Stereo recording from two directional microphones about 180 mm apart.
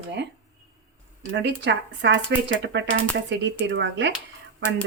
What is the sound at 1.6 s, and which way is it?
Speech, 75° right (ahead or behind).